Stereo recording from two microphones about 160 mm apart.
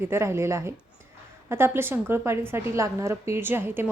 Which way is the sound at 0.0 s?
15° right (ahead or behind).